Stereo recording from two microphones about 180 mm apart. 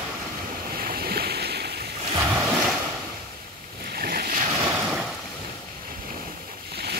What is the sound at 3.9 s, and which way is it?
Waves, 55° right (ahead or behind).